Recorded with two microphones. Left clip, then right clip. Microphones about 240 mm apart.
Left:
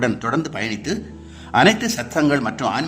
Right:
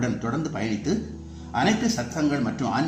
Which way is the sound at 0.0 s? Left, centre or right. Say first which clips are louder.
Left 7 dB; left.